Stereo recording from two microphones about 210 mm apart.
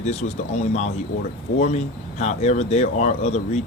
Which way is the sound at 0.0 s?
30° left (ahead or behind).